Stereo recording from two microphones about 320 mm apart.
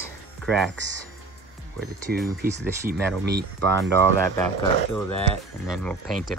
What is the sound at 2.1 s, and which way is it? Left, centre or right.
Speech, right.